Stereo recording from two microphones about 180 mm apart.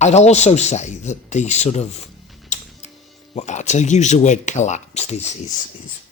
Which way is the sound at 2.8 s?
40° left (ahead or behind).